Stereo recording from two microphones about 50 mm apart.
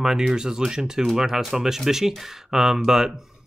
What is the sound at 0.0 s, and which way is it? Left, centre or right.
Speech, centre.